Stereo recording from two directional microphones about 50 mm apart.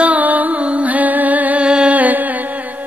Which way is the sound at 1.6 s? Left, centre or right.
Right.